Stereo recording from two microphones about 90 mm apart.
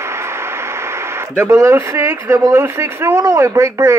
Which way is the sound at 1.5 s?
35° right (ahead or behind).